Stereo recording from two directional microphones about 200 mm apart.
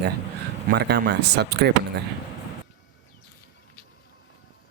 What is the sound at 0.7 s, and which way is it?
Speech, 55° right (ahead or behind).